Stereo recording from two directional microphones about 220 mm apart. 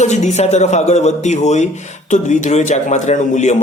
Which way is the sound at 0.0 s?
30° left (ahead or behind).